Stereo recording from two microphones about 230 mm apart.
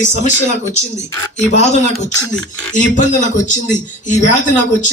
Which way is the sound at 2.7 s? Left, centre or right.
Left.